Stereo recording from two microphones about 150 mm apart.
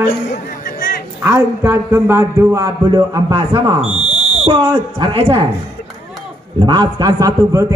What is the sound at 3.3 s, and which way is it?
Speech, 30° right (ahead or behind).